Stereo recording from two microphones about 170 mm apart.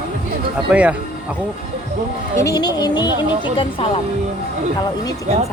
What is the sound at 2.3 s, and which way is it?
Speech, 20° left (ahead or behind).